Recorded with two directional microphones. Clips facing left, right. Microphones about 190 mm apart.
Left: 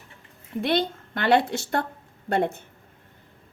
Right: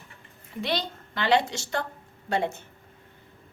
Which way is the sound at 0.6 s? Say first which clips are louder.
Left 5 dB; 55° left (ahead or behind).